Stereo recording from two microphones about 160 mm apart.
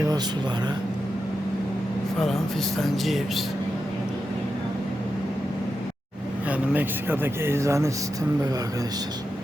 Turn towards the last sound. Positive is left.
turn(degrees=-20)  # may be behind; listen again after turning